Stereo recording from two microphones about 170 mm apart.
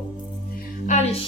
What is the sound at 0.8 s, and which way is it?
Music, 40° left (ahead or behind).